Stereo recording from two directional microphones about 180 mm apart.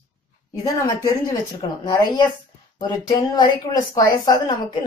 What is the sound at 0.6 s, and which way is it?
A woman's voice, 20° left (ahead or behind).